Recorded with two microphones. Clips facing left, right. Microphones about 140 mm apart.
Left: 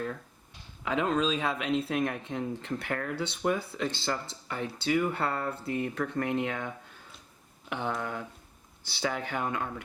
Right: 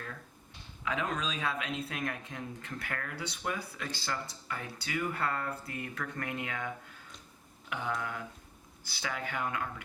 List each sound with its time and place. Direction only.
0.9 s speech: 30° left (ahead or behind)
7.7 s speech: 30° left (ahead or behind)